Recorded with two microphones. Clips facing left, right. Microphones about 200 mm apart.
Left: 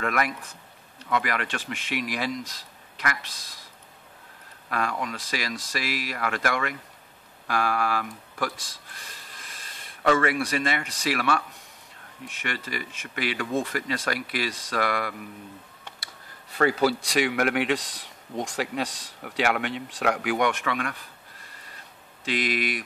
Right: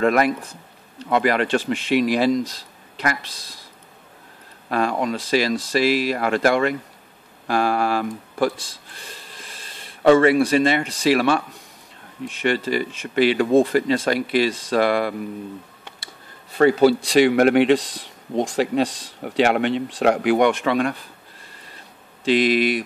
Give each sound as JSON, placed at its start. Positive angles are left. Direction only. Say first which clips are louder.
{"t": 0.0, "sound": "speech", "louder": "right 9 dB", "side_deg": -30}
{"t": 4.6, "sound": "speech", "louder": "right 8 dB", "side_deg": -30}
{"t": 16.5, "sound": "speech", "louder": "right 8 dB", "side_deg": -25}
{"t": 22.2, "sound": "speech", "louder": "right 10 dB", "side_deg": -30}